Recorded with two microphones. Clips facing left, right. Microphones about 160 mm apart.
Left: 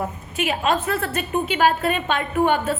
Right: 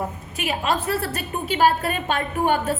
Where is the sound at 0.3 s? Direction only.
40° right (ahead or behind).